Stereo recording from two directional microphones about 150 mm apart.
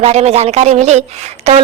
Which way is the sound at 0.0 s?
45° right (ahead or behind).